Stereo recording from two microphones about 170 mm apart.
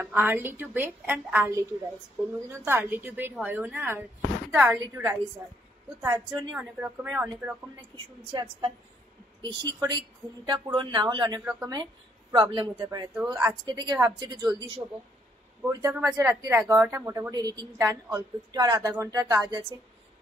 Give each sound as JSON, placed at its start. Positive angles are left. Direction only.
{"t": 0.0, "sound": "a woman's voice", "side_deg": -10}
{"t": 2.6, "sound": "a woman's voice", "side_deg": -10}
{"t": 6.5, "sound": "a woman's voice", "side_deg": -10}
{"t": 8.3, "sound": "a woman's voice", "side_deg": -30}
{"t": 13.1, "sound": "a woman's voice", "side_deg": -10}
{"t": 13.7, "sound": "a woman's voice", "side_deg": -25}
{"t": 15.6, "sound": "a woman's voice", "side_deg": -20}